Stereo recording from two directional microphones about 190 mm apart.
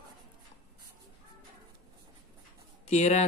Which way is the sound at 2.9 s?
35° left (ahead or behind).